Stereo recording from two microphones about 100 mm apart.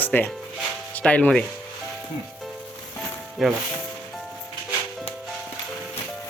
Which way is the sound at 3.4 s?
Centre (ahead or behind).